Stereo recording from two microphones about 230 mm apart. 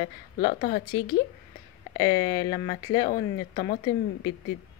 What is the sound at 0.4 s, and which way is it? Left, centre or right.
Speech, left.